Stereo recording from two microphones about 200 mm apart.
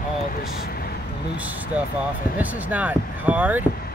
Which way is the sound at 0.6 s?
50° left (ahead or behind).